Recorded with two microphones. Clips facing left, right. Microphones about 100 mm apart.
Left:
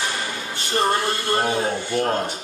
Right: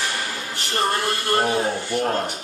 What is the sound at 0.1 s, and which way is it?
Music, 20° left (ahead or behind).